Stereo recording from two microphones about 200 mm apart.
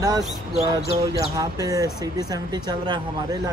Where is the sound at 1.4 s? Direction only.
15° right (ahead or behind).